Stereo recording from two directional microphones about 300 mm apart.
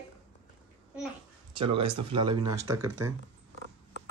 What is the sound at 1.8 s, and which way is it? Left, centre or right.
Speech, centre.